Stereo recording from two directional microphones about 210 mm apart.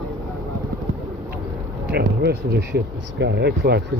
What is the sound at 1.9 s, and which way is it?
Speech, 50° right (ahead or behind).